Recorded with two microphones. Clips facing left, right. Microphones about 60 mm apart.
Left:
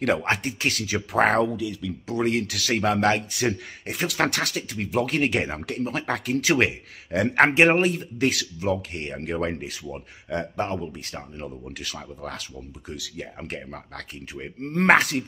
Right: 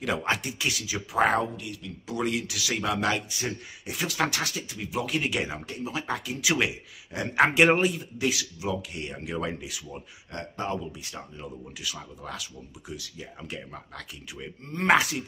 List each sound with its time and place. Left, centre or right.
0.1 s speech: left
2.0 s speech: left
2.4 s speech: left
3.3 s speech: left
3.8 s speech: left
4.2 s speech: left
7.1 s speech: left
7.4 s speech: left
7.9 s speech: left
14.6 s speech: left
14.9 s speech: left